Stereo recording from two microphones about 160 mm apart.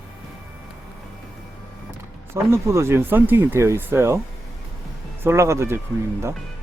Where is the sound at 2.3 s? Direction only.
15° right (ahead or behind).